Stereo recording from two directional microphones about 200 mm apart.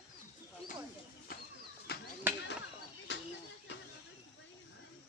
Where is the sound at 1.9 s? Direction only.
50° left (ahead or behind).